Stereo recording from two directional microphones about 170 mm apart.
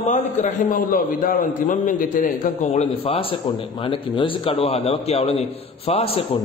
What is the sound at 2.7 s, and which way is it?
A man's voice, 35° left (ahead or behind).